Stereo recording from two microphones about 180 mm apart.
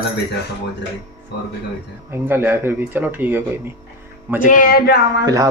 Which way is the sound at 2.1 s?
10° right (ahead or behind).